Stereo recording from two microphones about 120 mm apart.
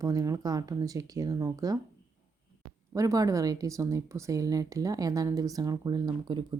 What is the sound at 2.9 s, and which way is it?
Speech, 30° right (ahead or behind).